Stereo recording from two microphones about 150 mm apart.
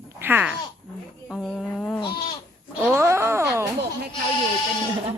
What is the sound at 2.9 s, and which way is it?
Speech, 20° right (ahead or behind).